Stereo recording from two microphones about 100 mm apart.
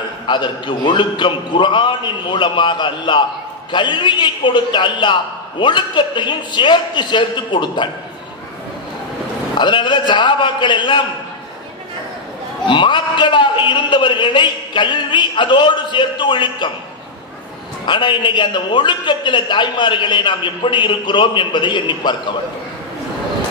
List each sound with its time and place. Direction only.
0.3 s a man's voice: 50° left (ahead or behind)
9.6 s a man's voice: 50° left (ahead or behind)
12.6 s a man's voice: 50° left (ahead or behind)
17.8 s a man's voice: 55° left (ahead or behind)